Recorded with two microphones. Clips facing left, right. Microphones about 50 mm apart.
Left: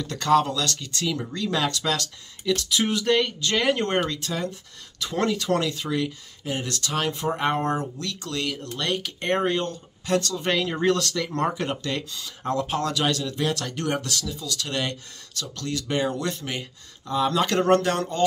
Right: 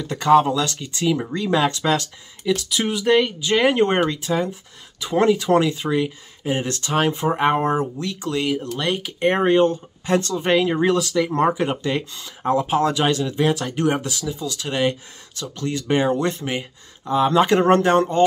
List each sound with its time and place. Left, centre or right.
0.0 s speech: centre
2.5 s speech: centre; by 18.2 s right